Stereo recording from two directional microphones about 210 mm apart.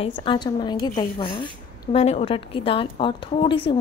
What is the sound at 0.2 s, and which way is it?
A woman's voice, 20° left (ahead or behind).